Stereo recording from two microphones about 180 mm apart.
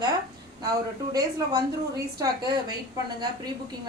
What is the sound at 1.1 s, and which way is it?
A woman's voice, 20° right (ahead or behind).